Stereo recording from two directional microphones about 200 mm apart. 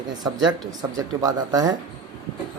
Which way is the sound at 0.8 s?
20° right (ahead or behind).